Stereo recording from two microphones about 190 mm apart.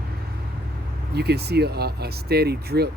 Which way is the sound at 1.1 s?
60° right (ahead or behind).